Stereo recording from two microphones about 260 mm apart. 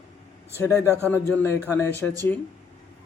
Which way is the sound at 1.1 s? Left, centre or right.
Centre.